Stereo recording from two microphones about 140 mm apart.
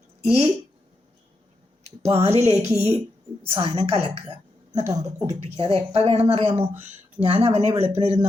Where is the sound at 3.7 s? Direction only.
50° right (ahead or behind).